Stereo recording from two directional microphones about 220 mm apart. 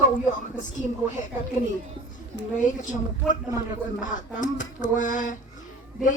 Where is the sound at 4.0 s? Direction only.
35° left (ahead or behind).